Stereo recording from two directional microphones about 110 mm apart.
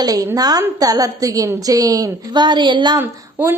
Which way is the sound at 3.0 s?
20° right (ahead or behind).